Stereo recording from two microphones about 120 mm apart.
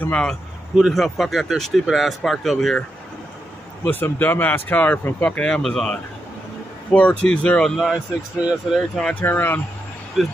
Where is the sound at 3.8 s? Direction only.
15° left (ahead or behind).